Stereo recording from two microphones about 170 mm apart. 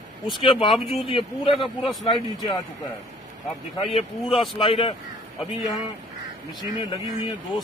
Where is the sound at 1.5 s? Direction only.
Centre (ahead or behind).